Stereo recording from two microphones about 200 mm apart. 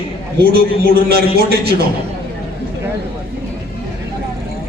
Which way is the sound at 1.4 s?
50° right (ahead or behind).